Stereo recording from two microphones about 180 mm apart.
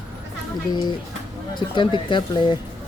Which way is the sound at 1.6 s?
25° left (ahead or behind).